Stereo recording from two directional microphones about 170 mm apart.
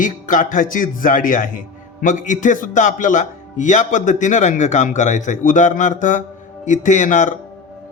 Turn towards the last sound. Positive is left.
turn(degrees=50)  # may be behind; listen again after turning